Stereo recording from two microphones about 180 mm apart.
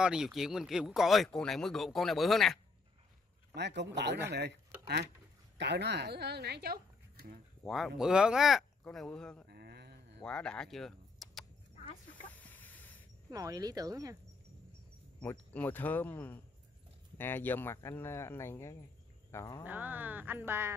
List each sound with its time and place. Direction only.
0.0 s speech: 5° right (ahead or behind)
3.5 s speech: 75° right (ahead or behind)
7.6 s speech: centre (ahead or behind)
9.5 s a sound: 60° right (ahead or behind)
10.2 s speech: 5° left (ahead or behind)
11.8 s chicken: 35° left (ahead or behind)
12.4 s a sound: 10° left (ahead or behind)
13.3 s speech: 20° right (ahead or behind)
15.1 s speech: 10° left (ahead or behind)
19.6 s speech: 10° right (ahead or behind)